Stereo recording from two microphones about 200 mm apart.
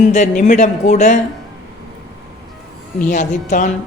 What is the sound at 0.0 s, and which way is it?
A woman's voice, 35° left (ahead or behind).